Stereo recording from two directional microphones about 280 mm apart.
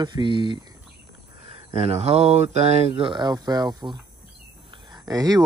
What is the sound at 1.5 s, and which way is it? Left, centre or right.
Speech, right.